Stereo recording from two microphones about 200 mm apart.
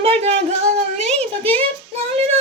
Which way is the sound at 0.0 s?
30° right (ahead or behind).